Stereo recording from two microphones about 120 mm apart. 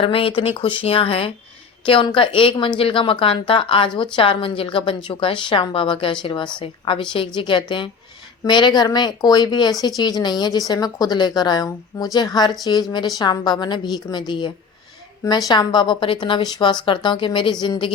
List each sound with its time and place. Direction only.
0.0 s a woman's voice: 50° left (ahead or behind)